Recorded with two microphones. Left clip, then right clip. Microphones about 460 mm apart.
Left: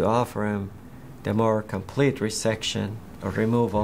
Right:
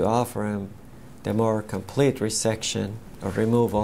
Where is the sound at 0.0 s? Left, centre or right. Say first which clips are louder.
Even; right.